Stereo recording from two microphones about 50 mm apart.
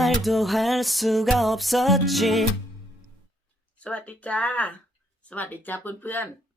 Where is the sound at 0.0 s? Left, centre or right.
Centre.